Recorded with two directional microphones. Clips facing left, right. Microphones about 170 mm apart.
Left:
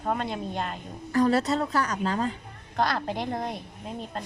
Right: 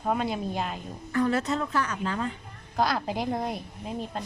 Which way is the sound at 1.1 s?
35° left (ahead or behind).